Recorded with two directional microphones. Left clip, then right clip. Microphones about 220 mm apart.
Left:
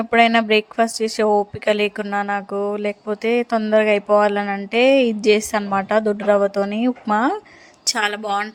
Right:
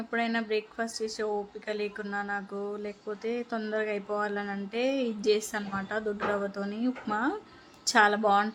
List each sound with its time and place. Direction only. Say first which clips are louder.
0.1 s speech: left 15 dB; 40° left (ahead or behind)